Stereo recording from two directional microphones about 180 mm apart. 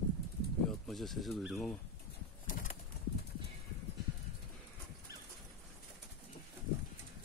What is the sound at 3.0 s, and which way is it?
Clip-clop, 65° left (ahead or behind).